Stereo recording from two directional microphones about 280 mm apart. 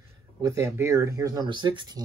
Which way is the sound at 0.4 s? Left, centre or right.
Centre.